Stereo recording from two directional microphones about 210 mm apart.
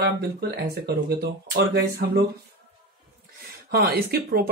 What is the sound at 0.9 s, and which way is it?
Speech, 50° right (ahead or behind).